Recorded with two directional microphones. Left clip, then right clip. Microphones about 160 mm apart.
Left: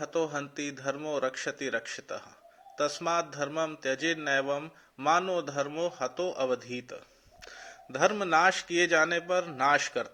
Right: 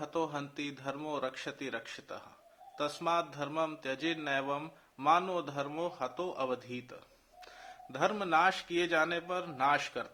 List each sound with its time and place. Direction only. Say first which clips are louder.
0.0 s speech: left 5 dB; 15° left (ahead or behind)